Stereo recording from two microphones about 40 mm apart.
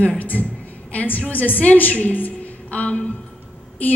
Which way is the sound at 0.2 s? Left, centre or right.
Left.